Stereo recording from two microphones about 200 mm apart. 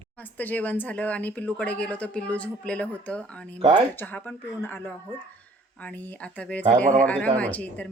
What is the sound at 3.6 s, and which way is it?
Speech, 35° right (ahead or behind).